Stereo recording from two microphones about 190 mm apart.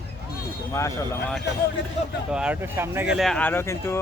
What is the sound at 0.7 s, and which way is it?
Speech, 15° left (ahead or behind).